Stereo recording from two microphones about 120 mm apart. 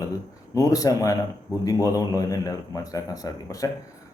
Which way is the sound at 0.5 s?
30° left (ahead or behind).